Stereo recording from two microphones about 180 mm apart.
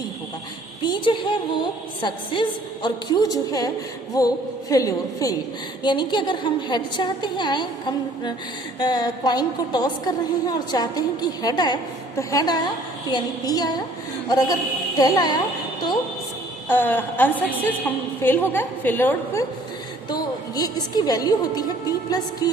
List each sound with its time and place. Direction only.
0.8 s a woman's voice: 25° left (ahead or behind)
16.6 s a woman's voice: 10° left (ahead or behind)